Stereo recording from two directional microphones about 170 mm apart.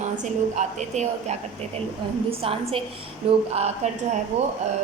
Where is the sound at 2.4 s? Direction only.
35° right (ahead or behind).